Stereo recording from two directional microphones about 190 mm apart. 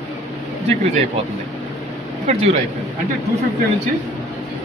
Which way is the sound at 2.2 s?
35° right (ahead or behind).